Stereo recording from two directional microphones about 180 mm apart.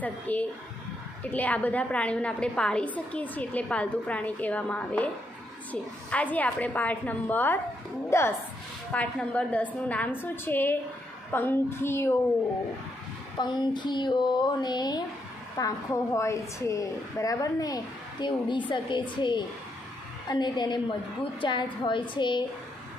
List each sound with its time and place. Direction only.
0.0 s a woman's voice: 10° left (ahead or behind)
13.4 s a woman's voice: 25° left (ahead or behind)